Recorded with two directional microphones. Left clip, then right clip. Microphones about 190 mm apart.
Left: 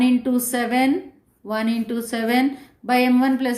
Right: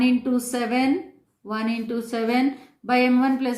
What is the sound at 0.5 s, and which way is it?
A woman's voice, 30° left (ahead or behind).